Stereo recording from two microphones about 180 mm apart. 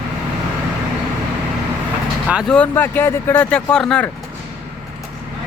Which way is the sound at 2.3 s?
5° right (ahead or behind).